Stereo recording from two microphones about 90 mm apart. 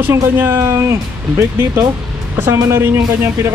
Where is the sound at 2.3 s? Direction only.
30° right (ahead or behind).